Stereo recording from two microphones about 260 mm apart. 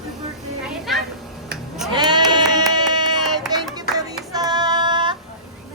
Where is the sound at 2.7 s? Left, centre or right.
Centre.